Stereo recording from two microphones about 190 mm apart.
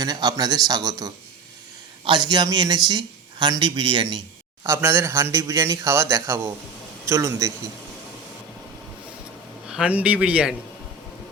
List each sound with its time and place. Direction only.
0.0 s speech: 20° right (ahead or behind)
9.6 s speech: 5° right (ahead or behind)